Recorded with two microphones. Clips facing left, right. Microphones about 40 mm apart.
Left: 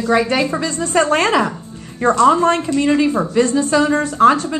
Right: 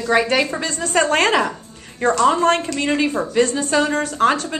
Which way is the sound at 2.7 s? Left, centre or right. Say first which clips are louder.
Left 5 dB; right.